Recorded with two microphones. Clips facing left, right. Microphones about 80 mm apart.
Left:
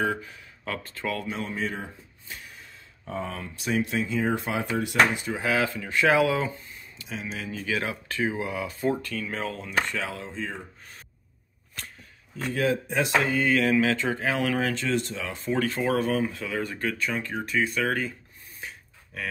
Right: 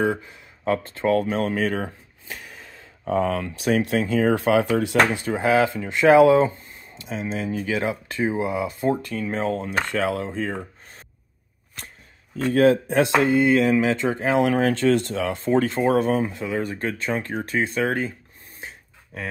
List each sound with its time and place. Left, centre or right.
0.2 s speech: right
1.1 s speech: right
5.4 s speech: right
9.7 s speech: right
12.4 s speech: right
13.2 s speech: right
17.2 s speech: right